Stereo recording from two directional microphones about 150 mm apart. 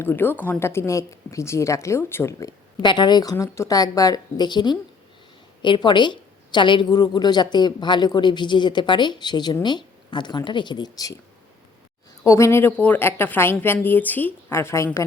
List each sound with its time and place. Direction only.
0.0 s a woman's voice: 15° left (ahead or behind)
12.2 s a woman's voice: 20° left (ahead or behind)